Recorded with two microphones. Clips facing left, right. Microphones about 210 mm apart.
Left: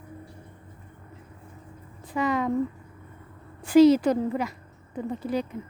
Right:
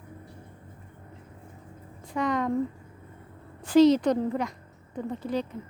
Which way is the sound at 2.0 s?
5° left (ahead or behind).